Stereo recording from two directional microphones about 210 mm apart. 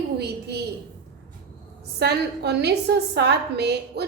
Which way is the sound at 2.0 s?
50° right (ahead or behind).